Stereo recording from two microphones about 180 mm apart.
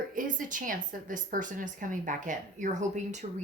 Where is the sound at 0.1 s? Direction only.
50° right (ahead or behind).